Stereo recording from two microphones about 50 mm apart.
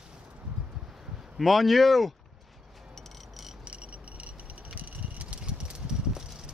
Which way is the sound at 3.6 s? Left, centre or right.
Right.